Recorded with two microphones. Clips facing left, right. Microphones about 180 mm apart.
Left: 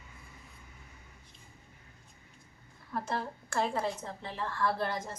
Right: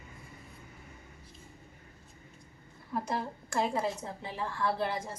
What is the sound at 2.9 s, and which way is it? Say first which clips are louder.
A woman's voice: right 1 dB; 15° right (ahead or behind).